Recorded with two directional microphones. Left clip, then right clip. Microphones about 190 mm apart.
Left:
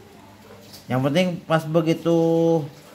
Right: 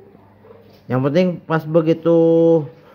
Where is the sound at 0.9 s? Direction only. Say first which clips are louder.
Right 4 dB; 25° right (ahead or behind).